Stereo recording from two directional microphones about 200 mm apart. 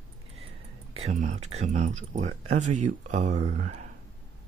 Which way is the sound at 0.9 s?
35° right (ahead or behind).